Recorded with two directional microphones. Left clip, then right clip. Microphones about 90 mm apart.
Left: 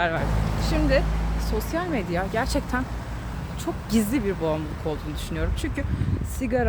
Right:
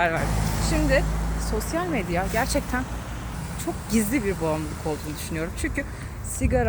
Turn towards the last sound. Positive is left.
turn(degrees=15)  # may be behind; listen again after turning